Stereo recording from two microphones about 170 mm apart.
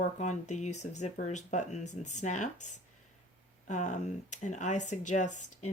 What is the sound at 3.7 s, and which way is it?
Speech, 45° left (ahead or behind).